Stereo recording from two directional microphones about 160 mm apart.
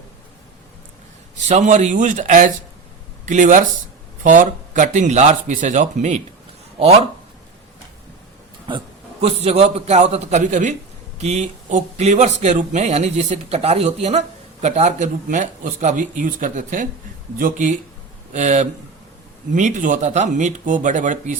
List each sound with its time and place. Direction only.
1.5 s speech: 45° right (ahead or behind)
8.7 s speech: 30° right (ahead or behind)
9.2 s a man's voice: 40° right (ahead or behind)